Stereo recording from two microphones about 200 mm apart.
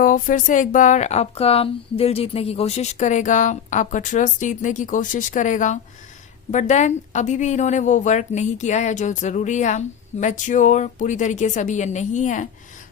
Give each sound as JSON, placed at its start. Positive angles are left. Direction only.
{"t": 0.0, "sound": "a woman's voice", "side_deg": 40}